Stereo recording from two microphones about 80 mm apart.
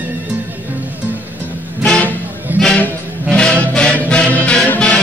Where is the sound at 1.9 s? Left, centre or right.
Centre.